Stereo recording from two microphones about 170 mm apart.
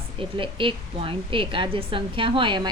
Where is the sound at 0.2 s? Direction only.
30° right (ahead or behind).